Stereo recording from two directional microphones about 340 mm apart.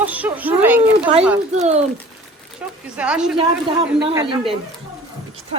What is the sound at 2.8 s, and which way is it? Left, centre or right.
A woman's voice, centre.